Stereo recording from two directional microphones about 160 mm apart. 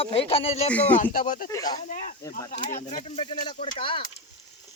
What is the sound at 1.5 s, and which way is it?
Speech, 25° left (ahead or behind).